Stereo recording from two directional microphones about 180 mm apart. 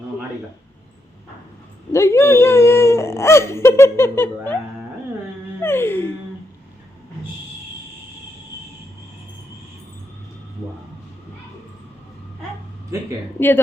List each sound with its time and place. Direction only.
1.9 s speech: 15° left (ahead or behind)
5.6 s speech: 15° left (ahead or behind)
12.9 s speech: 15° right (ahead or behind)